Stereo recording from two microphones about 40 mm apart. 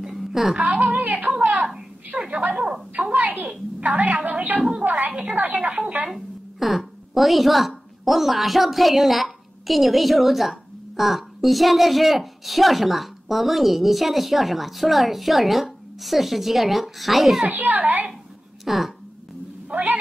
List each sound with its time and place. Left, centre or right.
0.0 s a sound: centre
0.6 s a woman's voice: right
1.4 s a sound: right
2.1 s a woman's voice: centre
2.5 s a woman's voice: right
2.9 s a woman's voice: right
6.0 s a woman's voice: centre
17.5 s a child's voice: right
18.6 s speech: centre
19.7 s a woman's voice: right